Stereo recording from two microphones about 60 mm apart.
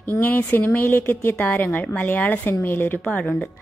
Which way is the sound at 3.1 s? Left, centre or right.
Left.